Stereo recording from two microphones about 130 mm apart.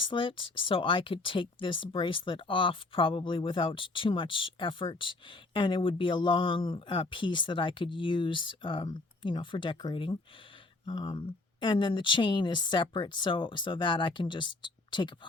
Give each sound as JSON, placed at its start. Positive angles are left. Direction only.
{"t": 0.0, "sound": "speech", "side_deg": 40}